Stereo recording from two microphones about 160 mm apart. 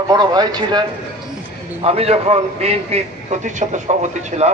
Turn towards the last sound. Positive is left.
turn(degrees=-45)  # may be behind; listen again after turning